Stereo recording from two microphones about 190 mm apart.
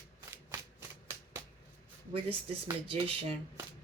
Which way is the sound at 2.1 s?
30° right (ahead or behind).